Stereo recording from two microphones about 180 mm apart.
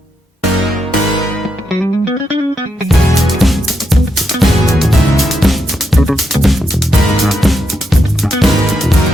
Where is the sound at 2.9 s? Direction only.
Centre (ahead or behind).